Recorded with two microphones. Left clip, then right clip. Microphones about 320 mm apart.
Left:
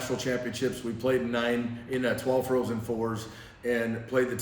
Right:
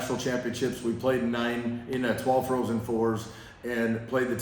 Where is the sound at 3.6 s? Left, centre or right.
Centre.